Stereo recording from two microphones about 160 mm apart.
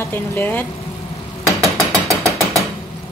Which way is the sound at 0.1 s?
10° left (ahead or behind).